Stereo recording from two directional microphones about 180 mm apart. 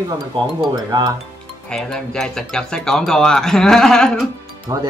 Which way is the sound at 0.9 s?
25° right (ahead or behind).